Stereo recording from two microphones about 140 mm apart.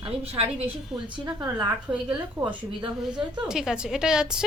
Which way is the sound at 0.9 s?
Centre (ahead or behind).